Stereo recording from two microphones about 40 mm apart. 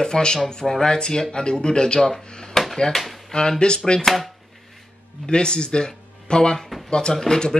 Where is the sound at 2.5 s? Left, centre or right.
Centre.